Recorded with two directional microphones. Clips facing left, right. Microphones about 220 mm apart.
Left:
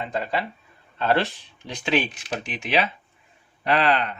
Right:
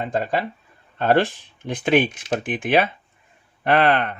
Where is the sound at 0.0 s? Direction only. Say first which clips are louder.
Right 4 dB; 45° right (ahead or behind).